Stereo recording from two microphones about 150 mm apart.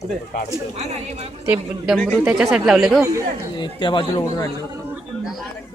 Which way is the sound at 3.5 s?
30° left (ahead or behind).